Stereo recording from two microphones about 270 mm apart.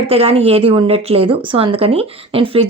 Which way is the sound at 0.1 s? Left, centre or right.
Right.